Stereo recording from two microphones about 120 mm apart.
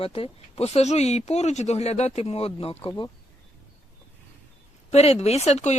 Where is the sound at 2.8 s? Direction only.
40° left (ahead or behind).